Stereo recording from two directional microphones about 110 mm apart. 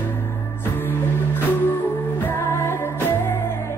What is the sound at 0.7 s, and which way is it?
Music, 20° left (ahead or behind).